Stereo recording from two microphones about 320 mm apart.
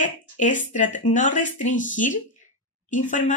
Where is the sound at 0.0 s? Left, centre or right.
Left.